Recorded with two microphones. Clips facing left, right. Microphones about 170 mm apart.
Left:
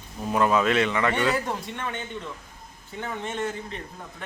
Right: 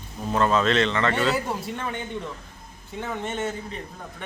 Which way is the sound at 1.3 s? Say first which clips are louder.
Right 1 dB; 5° right (ahead or behind).